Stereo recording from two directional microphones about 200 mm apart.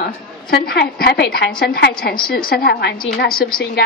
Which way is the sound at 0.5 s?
50° left (ahead or behind).